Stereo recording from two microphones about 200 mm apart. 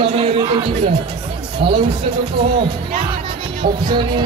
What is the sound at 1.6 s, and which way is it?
Speech, 30° right (ahead or behind).